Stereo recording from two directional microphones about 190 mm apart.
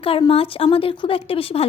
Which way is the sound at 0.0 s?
30° left (ahead or behind).